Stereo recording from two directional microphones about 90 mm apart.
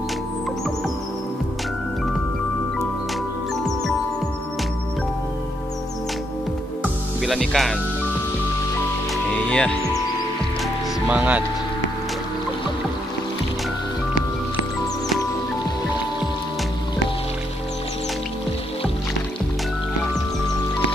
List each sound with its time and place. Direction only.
7.2 s speech: centre (ahead or behind)
9.1 s music: 10° left (ahead or behind)
11.1 s speech: 15° right (ahead or behind)